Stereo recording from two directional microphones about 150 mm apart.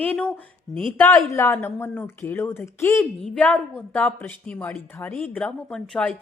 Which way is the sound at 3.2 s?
5° left (ahead or behind).